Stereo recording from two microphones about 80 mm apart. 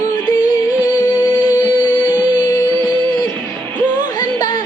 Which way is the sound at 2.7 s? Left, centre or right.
Right.